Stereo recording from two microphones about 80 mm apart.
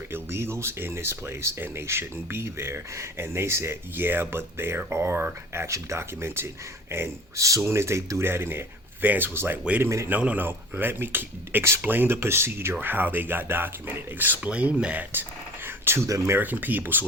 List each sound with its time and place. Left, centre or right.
0.1 s speech: right
10.1 s speech: centre
15.6 s a sound: right
16.0 s speech: right
16.4 s speech: right